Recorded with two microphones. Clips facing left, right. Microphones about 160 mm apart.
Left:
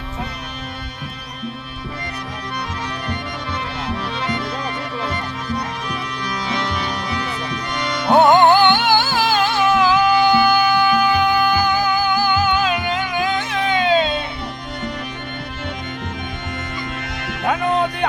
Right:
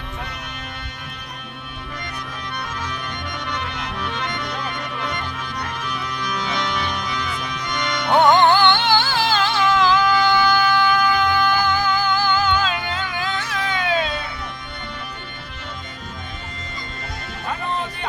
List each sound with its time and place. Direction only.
3.5 s music: 5° left (ahead or behind)
6.2 s music: 5° left (ahead or behind)
9.0 s music: 45° left (ahead or behind)
9.3 s music: 10° left (ahead or behind)
17.2 s music: 75° left (ahead or behind)